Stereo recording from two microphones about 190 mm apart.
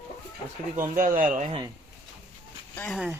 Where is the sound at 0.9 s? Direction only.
45° right (ahead or behind).